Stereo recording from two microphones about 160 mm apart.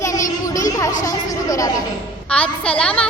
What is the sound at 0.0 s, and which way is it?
Children playing, 20° left (ahead or behind).